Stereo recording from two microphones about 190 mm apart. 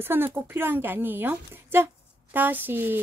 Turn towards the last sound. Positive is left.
turn(degrees=-10)  # may be behind; listen again after turning